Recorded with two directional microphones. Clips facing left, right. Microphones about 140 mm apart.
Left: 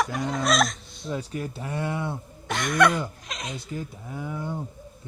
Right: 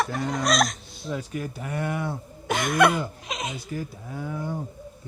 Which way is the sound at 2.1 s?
5° right (ahead or behind).